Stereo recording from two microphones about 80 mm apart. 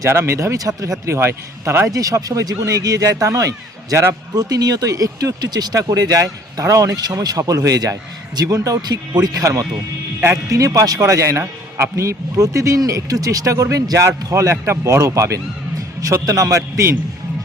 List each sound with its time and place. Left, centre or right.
0.0 s speech: right
1.9 s speech: right
4.4 s speech: right